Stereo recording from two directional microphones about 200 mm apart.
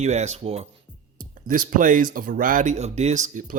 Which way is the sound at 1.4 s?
45° right (ahead or behind).